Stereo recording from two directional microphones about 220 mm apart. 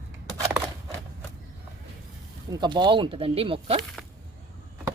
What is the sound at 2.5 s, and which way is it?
Speech, 20° right (ahead or behind).